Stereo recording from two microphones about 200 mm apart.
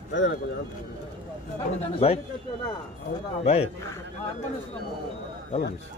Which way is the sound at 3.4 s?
30° left (ahead or behind).